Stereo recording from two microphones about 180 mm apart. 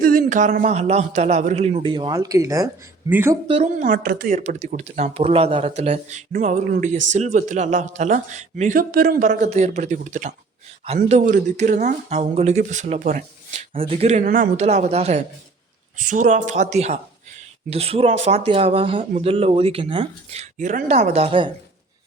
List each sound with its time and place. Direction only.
0.0 s speech: 55° right (ahead or behind); by 3.3 s 10° right (ahead or behind)
3.4 s a woman's voice: 35° right (ahead or behind); by 4.4 s 55° right (ahead or behind)
4.4 s a woman's voice: 40° right (ahead or behind)